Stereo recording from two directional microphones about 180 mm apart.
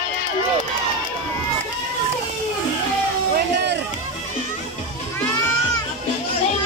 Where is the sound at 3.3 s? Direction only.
70° right (ahead or behind).